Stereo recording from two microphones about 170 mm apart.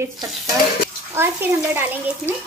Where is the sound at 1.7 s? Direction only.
10° right (ahead or behind).